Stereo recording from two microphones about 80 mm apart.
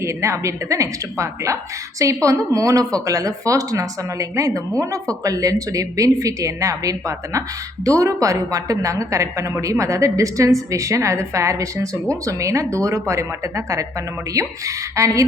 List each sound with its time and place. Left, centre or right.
0.0 s a woman's voice: right
14.9 s a woman's voice: right